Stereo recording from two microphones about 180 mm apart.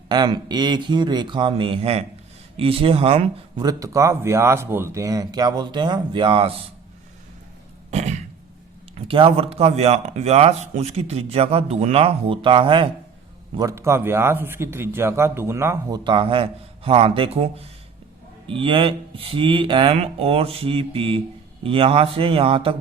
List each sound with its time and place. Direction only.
0.1 s speech: 25° right (ahead or behind)
3.7 s speech: 20° right (ahead or behind)
7.9 s a sound: 40° right (ahead or behind)
9.0 s speech: 30° right (ahead or behind)
13.6 s a man's voice: 15° right (ahead or behind); by 22.7 s 30° right (ahead or behind)